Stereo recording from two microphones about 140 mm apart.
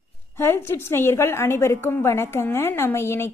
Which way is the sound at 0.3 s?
15° left (ahead or behind).